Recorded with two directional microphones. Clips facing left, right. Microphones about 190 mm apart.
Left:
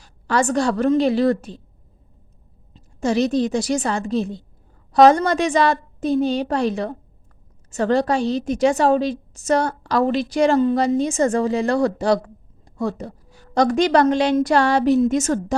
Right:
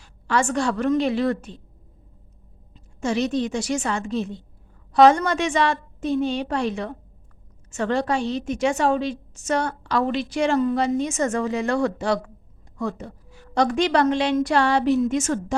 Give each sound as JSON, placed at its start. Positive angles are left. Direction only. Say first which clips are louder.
{"t": 0.0, "sound": "a woman's voice", "louder": "left 3 dB", "side_deg": 40}
{"t": 2.7, "sound": "a woman's voice", "louder": "left 4 dB", "side_deg": 35}